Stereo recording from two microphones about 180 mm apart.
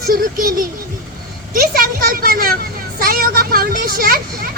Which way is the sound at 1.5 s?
55° right (ahead or behind).